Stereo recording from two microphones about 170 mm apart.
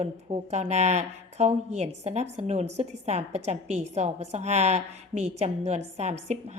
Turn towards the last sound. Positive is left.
turn(degrees=-40)  # may be behind; listen again after turning